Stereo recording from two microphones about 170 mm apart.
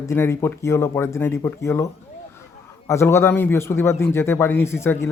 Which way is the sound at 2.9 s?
15° left (ahead or behind).